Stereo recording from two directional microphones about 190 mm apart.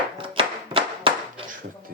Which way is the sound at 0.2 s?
30° right (ahead or behind).